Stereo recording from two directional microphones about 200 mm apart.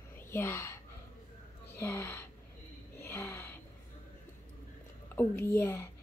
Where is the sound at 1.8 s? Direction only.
10° left (ahead or behind).